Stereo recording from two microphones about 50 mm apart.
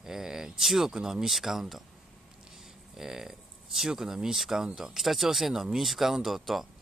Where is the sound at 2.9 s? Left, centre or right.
Centre.